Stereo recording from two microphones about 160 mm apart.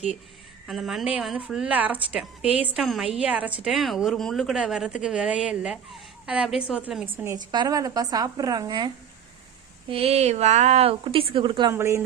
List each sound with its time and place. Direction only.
0.7 s a woman's voice: centre (ahead or behind)
7.3 s a woman's voice: 25° right (ahead or behind)
9.9 s a woman's voice: 40° right (ahead or behind)
11.7 s a woman's voice: 15° right (ahead or behind)